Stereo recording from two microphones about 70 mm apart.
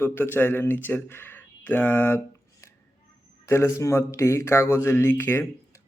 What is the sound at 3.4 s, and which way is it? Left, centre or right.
Speech, left.